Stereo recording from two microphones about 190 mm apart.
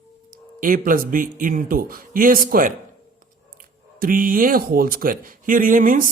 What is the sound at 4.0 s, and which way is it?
A man's voice, 50° right (ahead or behind).